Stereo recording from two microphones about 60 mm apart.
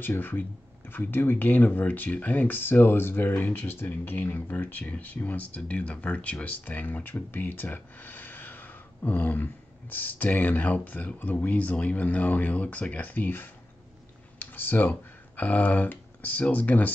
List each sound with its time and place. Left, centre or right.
0.0 s speech: left